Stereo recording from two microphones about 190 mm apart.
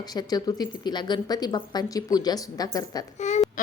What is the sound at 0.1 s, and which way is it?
Speech, 20° left (ahead or behind).